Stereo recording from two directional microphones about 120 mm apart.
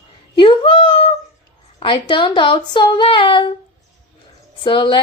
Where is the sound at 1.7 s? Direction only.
45° left (ahead or behind).